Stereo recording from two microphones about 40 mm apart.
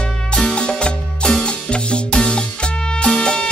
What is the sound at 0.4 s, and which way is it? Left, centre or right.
Music, left.